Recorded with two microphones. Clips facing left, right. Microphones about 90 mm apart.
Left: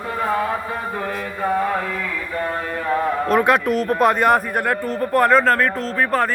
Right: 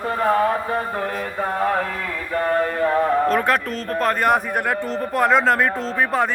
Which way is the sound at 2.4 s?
45° right (ahead or behind).